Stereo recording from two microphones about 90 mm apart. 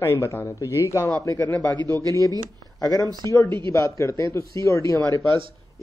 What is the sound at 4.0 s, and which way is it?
Speech, 35° left (ahead or behind).